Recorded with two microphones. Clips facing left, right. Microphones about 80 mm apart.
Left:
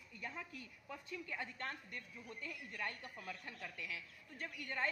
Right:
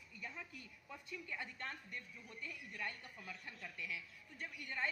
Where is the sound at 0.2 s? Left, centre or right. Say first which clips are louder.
Left 3 dB; left.